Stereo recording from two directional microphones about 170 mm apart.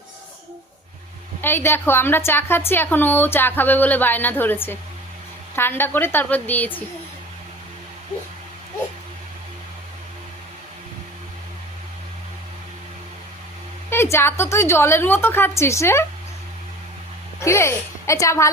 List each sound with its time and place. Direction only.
1.4 s a woman's voice: 15° left (ahead or behind)
13.9 s a woman's voice: 15° left (ahead or behind)
17.4 s a woman's voice: 15° left (ahead or behind)